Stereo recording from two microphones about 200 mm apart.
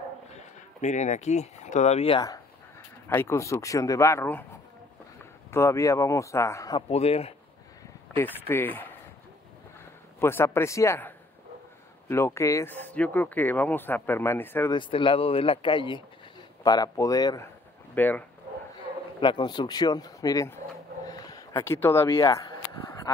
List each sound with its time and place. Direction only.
0.7 s speech: 35° left (ahead or behind); by 4.5 s 10° left (ahead or behind)
5.5 s speech: 15° left (ahead or behind)
6.9 s speech: 30° left (ahead or behind)
8.2 s speech: 10° left (ahead or behind)
10.2 s speech: 10° left (ahead or behind)
14.7 s speech: 25° left (ahead or behind); by 18.2 s 10° left (ahead or behind)
19.2 s speech: 20° left (ahead or behind)